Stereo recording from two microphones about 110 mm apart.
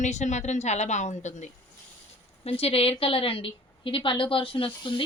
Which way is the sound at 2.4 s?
65° left (ahead or behind).